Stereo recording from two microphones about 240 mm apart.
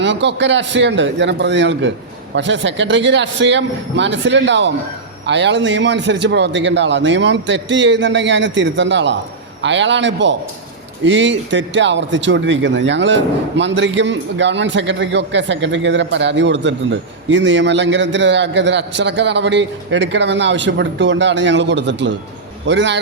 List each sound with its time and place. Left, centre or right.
0.0 s speech: right